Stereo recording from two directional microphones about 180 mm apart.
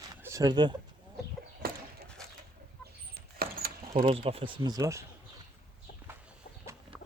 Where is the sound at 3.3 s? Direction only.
55° right (ahead or behind).